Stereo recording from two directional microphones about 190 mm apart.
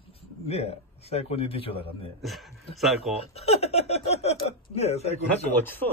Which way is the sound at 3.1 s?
30° left (ahead or behind).